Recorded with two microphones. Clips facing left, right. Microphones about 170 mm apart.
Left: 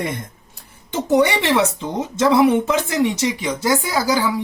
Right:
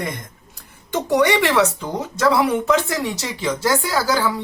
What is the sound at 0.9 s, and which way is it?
Speech, 25° left (ahead or behind).